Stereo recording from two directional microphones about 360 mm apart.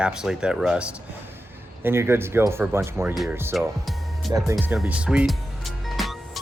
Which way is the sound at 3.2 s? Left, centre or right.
Centre.